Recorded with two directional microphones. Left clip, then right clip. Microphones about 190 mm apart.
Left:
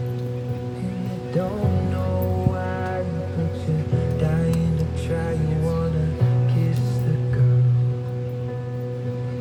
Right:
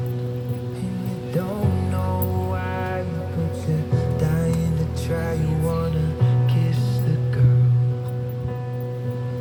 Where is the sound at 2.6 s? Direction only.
55° right (ahead or behind).